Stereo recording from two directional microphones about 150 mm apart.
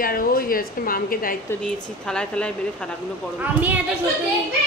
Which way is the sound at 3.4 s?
10° right (ahead or behind).